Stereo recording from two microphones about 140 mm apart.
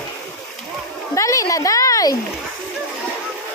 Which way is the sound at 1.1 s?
20° left (ahead or behind).